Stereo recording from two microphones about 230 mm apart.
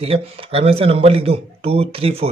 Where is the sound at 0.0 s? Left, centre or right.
Right.